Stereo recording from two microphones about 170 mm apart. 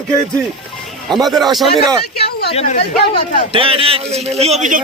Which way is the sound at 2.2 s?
70° left (ahead or behind).